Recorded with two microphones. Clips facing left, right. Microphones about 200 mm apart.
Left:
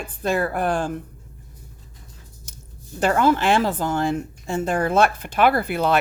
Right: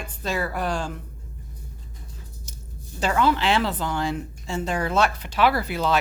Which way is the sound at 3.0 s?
50° left (ahead or behind).